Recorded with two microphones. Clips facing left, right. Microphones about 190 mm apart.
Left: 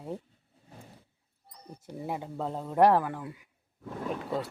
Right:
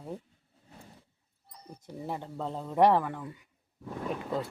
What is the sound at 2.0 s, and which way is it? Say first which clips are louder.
A man's voice: left 2 dB; 10° left (ahead or behind).